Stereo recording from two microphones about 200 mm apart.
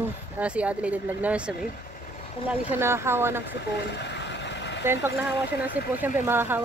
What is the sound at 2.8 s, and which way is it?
Speech, 10° right (ahead or behind).